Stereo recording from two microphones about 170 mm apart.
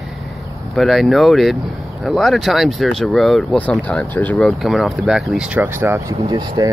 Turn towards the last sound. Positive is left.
turn(degrees=-20)  # may be behind; listen again after turning